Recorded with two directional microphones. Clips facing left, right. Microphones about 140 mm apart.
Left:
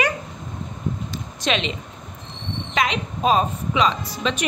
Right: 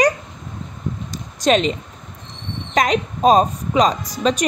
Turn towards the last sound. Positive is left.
turn(degrees=-40)  # may be behind; listen again after turning